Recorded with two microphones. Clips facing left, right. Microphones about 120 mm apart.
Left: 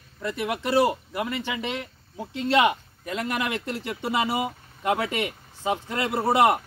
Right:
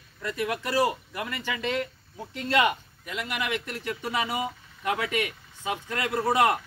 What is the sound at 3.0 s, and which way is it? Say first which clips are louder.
Speech: left 3 dB; 35° left (ahead or behind).